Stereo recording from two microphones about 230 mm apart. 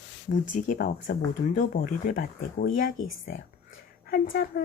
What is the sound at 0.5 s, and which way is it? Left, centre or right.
Speech, left.